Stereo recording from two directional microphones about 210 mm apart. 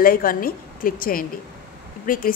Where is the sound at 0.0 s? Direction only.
45° left (ahead or behind).